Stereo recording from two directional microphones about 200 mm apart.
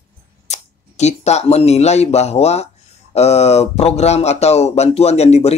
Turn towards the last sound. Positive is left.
turn(degrees=30)  # may be behind; listen again after turning